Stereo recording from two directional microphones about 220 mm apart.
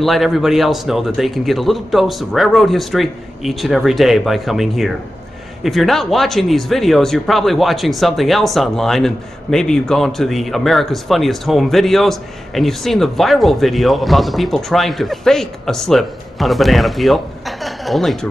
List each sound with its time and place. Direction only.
0.0 s speech: centre (ahead or behind)